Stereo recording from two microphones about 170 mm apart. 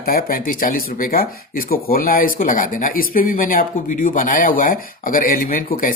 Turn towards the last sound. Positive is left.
turn(degrees=55)  # may be behind; listen again after turning